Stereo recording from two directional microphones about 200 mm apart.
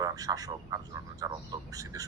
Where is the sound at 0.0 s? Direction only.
15° right (ahead or behind).